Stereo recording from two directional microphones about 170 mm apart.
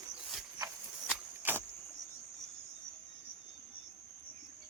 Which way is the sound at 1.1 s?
10° right (ahead or behind).